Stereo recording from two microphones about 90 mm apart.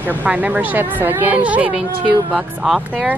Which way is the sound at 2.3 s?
Centre (ahead or behind).